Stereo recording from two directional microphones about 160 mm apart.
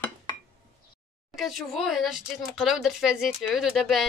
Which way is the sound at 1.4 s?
Centre (ahead or behind).